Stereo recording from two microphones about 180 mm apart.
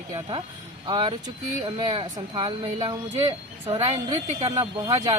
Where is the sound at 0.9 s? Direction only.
25° right (ahead or behind).